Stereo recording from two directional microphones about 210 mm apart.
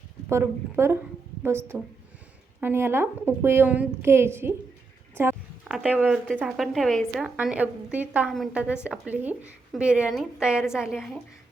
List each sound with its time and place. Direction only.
0.3 s a woman's voice: 10° right (ahead or behind)
5.1 s a sound: 10° right (ahead or behind)
5.7 s a woman's voice: 5° right (ahead or behind)